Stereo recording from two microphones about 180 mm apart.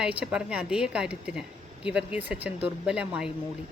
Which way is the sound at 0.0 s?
5° right (ahead or behind).